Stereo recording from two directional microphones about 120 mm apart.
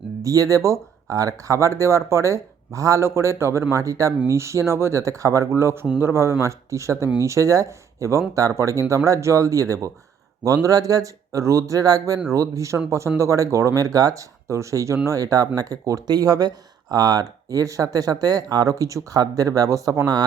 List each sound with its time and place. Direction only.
0.2 s speech: 25° right (ahead or behind)